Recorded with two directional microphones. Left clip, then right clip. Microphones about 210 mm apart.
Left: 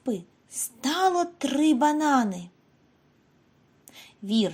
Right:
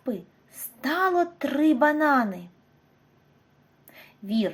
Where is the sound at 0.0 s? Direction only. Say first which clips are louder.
Left 1 dB; 35° left (ahead or behind).